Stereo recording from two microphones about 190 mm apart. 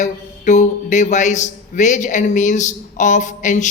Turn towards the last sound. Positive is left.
turn(degrees=40)  # may be behind; listen again after turning